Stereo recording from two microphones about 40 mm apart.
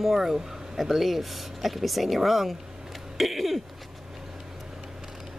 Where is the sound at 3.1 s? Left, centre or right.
Centre.